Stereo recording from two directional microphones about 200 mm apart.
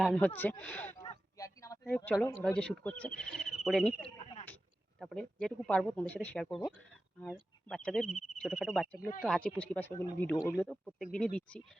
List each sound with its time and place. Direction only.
0.0 s speech: 5° left (ahead or behind)
1.0 s a sound: 20° left (ahead or behind)
2.2 s speech: 10° left (ahead or behind)
4.0 s a sound: 30° left (ahead or behind)
4.9 s speech: 5° left (ahead or behind)
8.1 s speech: 40° left (ahead or behind)
8.4 s speech: centre (ahead or behind)